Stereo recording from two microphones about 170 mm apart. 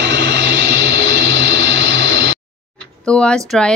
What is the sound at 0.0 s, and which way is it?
Vehicle, 90° right.